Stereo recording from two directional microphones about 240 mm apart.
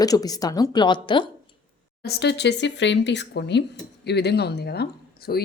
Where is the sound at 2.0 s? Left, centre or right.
Left.